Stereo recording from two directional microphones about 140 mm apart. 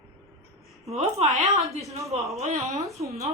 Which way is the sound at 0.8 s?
50° right (ahead or behind).